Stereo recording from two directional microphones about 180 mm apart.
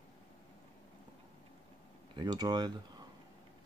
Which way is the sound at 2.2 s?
25° right (ahead or behind).